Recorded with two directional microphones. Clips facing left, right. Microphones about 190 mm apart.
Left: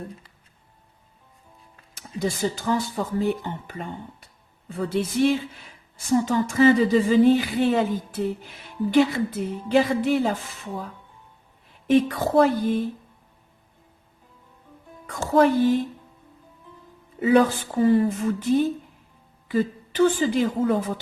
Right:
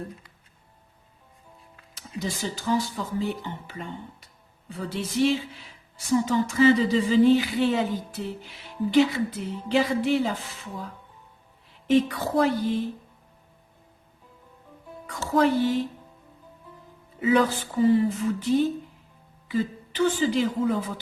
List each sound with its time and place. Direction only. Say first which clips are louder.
2.0 s speech: left 6 dB; 50° left (ahead or behind)
11.9 s speech: left 2 dB; 50° left (ahead or behind)
15.0 s speech: left 4 dB; 50° left (ahead or behind)
17.2 s a woman's voice: left 3 dB; 50° left (ahead or behind)